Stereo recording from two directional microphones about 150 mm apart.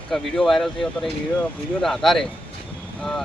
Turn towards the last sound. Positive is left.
turn(degrees=5)  # may be behind; listen again after turning